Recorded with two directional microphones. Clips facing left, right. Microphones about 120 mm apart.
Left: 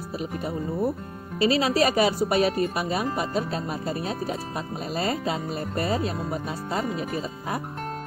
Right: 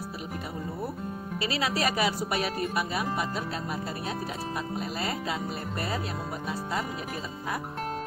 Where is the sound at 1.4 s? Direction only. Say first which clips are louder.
Left 8 dB; 30° left (ahead or behind).